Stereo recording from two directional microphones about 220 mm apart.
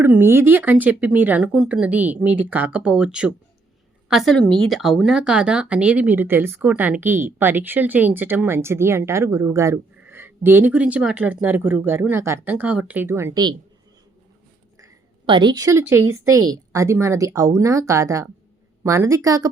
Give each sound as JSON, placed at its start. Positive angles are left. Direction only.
{"t": 0.0, "sound": "speech", "side_deg": -10}
{"t": 14.8, "sound": "speech", "side_deg": -20}